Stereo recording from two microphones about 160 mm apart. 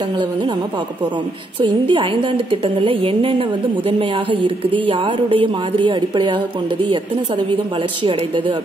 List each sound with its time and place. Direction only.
1.6 s a woman's voice: 30° right (ahead or behind)
8.0 s a woman's voice: 30° right (ahead or behind)